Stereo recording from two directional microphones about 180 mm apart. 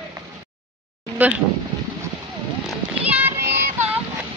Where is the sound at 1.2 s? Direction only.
10° right (ahead or behind).